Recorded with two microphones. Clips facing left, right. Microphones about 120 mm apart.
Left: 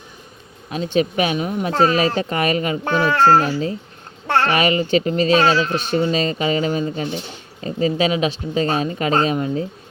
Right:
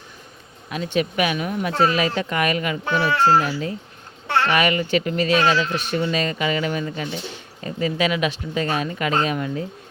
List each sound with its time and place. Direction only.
0.7 s speech: 30° left (ahead or behind)
2.8 s speech: 45° left (ahead or behind); by 9.6 s 30° left (ahead or behind)